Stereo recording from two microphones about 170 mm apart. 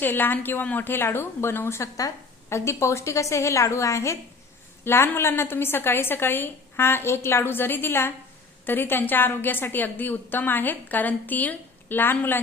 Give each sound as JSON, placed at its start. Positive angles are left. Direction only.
{"t": 0.0, "sound": "a woman's voice", "side_deg": 10}